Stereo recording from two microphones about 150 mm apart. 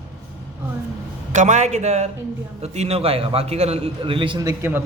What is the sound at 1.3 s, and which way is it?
A man's voice, 55° right (ahead or behind).